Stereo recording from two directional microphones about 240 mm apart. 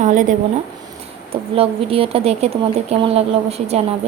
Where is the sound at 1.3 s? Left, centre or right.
Right.